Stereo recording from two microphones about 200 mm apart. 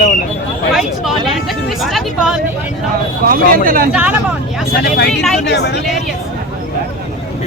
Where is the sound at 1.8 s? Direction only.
Centre (ahead or behind).